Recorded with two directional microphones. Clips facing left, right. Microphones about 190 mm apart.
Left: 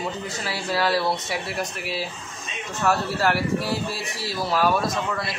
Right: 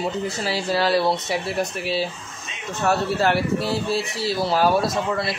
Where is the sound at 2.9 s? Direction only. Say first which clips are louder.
Right 2 dB; 25° right (ahead or behind).